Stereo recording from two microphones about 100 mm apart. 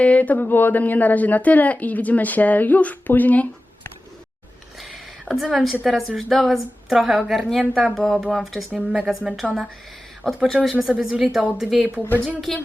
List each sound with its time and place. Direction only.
0.0 s speech: 15° left (ahead or behind)
4.8 s a sound: centre (ahead or behind)
5.8 s a woman's voice: centre (ahead or behind)
12.5 s a woman's voice: 5° left (ahead or behind)